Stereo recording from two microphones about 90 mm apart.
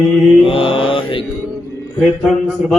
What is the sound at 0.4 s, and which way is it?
Mantra, 85° left.